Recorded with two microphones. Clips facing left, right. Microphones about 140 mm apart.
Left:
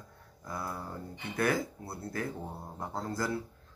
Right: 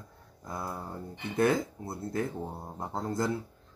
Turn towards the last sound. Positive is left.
turn(degrees=-20)  # may be behind; listen again after turning